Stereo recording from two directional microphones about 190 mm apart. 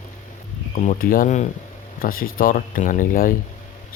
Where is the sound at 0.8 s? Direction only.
45° left (ahead or behind).